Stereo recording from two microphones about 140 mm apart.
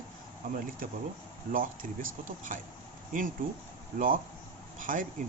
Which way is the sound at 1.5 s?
75° right (ahead or behind).